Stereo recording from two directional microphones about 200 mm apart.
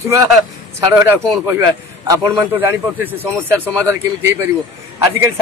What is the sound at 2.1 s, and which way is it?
Speech, 15° right (ahead or behind).